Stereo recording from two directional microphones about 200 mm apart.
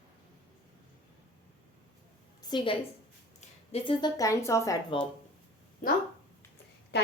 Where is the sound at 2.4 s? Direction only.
20° left (ahead or behind).